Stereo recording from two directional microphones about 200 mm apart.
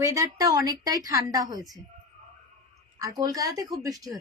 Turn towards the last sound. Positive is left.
turn(degrees=-15)  # may be behind; listen again after turning